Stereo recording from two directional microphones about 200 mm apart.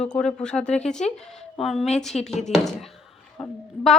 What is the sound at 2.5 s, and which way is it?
Speech, centre (ahead or behind).